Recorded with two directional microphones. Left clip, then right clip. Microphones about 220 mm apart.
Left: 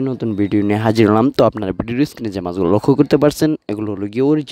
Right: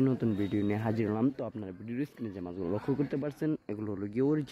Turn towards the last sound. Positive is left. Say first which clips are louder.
# left 14 dB
turn(degrees=35)  # may be behind; listen again after turning